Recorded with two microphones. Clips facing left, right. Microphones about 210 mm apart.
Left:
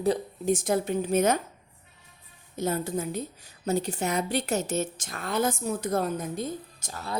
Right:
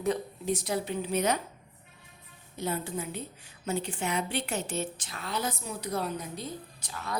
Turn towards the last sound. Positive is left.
turn(degrees=40)  # may be behind; listen again after turning